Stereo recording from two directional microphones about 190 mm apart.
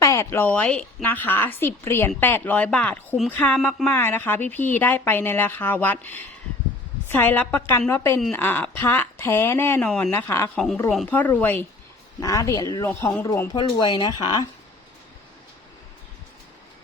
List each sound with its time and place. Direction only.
0.0 s a woman's voice: 15° left (ahead or behind)